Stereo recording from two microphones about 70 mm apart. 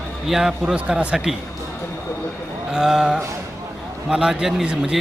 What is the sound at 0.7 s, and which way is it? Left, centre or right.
Speech, centre.